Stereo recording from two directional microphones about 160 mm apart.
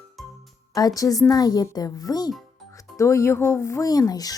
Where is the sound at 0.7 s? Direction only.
20° left (ahead or behind).